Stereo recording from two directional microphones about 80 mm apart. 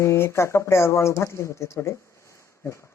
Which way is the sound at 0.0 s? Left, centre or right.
Left.